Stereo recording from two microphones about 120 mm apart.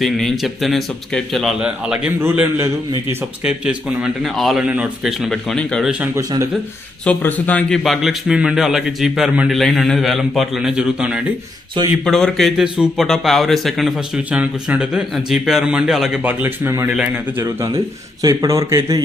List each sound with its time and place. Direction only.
0.0 s speech: centre (ahead or behind)
3.4 s speech: 5° right (ahead or behind)
6.1 s a man's voice: 25° right (ahead or behind)
7.1 s speech: 15° left (ahead or behind)
7.8 s speech: centre (ahead or behind)
12.0 s speech: 5° left (ahead or behind)
16.2 s a man's voice: 15° right (ahead or behind)